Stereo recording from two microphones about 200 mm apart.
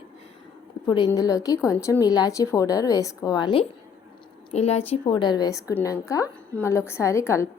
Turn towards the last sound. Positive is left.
turn(degrees=15)  # may be behind; listen again after turning